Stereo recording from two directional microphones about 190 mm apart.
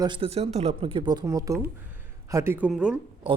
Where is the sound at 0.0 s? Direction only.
25° right (ahead or behind); by 3.0 s 5° right (ahead or behind).